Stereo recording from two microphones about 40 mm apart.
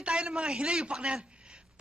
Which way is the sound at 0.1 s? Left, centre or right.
Right.